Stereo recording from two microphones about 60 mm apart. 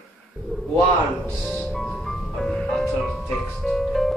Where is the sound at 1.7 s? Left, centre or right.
Centre.